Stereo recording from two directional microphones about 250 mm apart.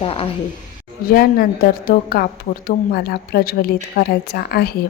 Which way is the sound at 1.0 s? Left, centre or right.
Left.